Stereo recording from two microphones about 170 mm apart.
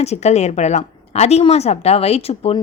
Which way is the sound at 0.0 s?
40° left (ahead or behind).